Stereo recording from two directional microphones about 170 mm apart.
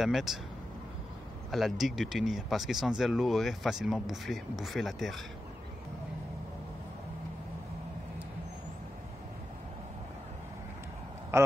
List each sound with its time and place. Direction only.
0.0 s speech: centre (ahead or behind)
1.5 s speech: centre (ahead or behind)
11.3 s a man's voice: 15° right (ahead or behind)